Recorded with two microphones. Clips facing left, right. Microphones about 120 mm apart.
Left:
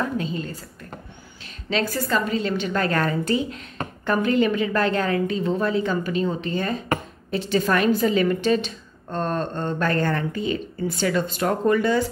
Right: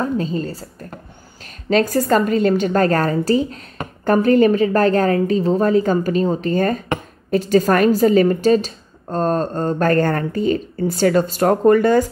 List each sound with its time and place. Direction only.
0.0 s a woman's voice: 35° right (ahead or behind)
1.7 s a woman's voice: 45° right (ahead or behind)